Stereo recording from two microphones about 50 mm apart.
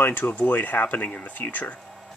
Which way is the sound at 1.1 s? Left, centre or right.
Left.